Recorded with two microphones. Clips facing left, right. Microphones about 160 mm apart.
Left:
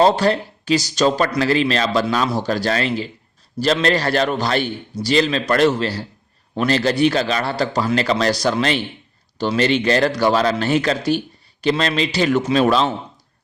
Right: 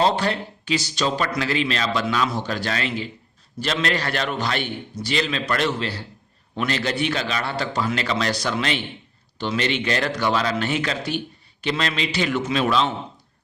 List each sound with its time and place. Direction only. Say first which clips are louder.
0.0 s speech: left 6 dB; 40° left (ahead or behind)